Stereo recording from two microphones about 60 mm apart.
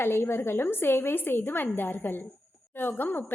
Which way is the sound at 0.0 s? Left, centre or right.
Left.